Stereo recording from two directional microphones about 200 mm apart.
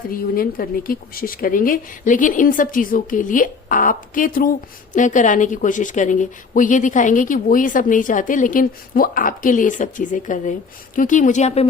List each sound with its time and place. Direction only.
0.1 s a woman's voice: 45° left (ahead or behind)